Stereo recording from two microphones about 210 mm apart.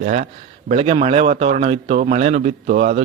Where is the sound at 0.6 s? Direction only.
30° right (ahead or behind).